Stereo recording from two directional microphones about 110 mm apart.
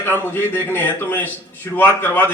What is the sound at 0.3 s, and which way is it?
A man's voice, 20° left (ahead or behind).